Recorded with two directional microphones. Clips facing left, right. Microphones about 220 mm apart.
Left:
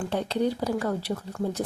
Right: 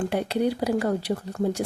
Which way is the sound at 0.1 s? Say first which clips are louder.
Right 2 dB; 10° right (ahead or behind).